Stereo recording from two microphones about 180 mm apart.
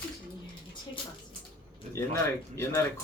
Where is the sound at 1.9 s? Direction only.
15° left (ahead or behind).